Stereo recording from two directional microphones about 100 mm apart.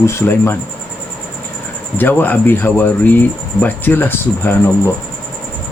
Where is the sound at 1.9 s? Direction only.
20° left (ahead or behind).